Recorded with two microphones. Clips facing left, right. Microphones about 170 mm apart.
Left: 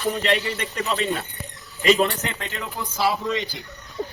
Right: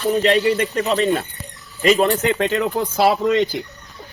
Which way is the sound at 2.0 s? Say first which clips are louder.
Right 11 dB; 65° right (ahead or behind).